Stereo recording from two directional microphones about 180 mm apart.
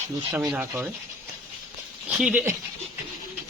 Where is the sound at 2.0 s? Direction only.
5° right (ahead or behind).